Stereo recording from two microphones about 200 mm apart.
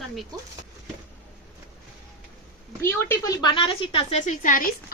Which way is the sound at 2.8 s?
10° left (ahead or behind).